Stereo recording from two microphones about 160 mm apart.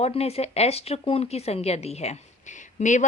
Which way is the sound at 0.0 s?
40° left (ahead or behind).